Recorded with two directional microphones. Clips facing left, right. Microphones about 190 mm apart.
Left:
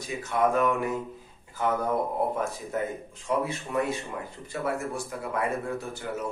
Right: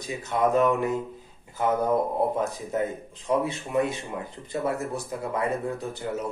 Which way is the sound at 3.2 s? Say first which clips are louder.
Right 3 dB; 20° right (ahead or behind).